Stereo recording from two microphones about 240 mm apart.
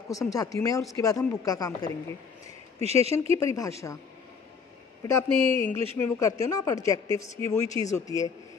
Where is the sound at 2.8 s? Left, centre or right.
Right.